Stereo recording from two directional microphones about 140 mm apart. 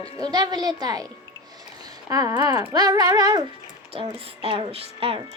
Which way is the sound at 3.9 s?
45° right (ahead or behind).